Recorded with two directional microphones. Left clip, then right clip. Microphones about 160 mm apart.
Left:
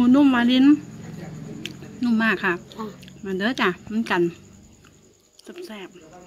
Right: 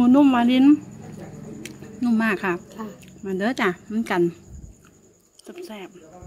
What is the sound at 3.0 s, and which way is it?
Speech, 15° right (ahead or behind).